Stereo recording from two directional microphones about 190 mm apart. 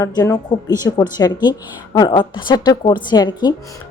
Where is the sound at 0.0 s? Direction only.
20° left (ahead or behind).